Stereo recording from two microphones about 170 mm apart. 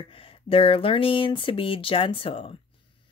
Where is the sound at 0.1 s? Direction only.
30° left (ahead or behind).